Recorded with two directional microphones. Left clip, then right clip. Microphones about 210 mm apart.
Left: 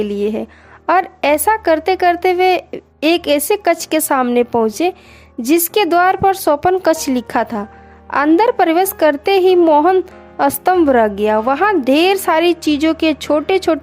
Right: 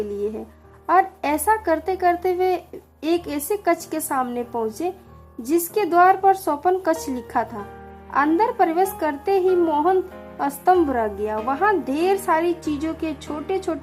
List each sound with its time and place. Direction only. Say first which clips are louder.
0.9 s a woman's voice: left 5 dB; 40° left (ahead or behind)